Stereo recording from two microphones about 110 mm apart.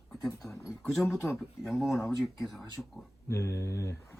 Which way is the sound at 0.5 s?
25° left (ahead or behind).